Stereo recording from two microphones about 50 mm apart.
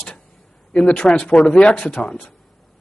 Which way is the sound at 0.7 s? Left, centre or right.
Left.